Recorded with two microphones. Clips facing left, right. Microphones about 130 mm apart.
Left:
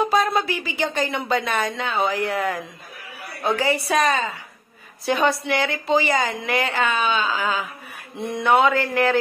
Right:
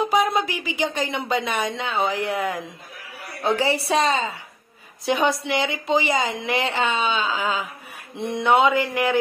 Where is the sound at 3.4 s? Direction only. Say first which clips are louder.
Even; 30° right (ahead or behind).